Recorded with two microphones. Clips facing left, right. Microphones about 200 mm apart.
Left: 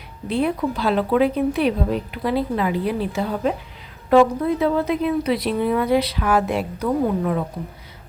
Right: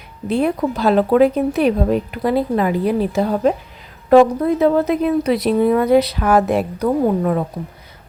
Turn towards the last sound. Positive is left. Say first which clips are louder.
# right 4 dB
turn(degrees=-45)  # may be behind; listen again after turning